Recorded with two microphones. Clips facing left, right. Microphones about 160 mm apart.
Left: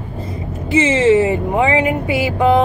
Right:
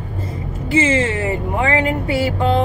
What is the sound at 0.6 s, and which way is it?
Speech, 20° left (ahead or behind).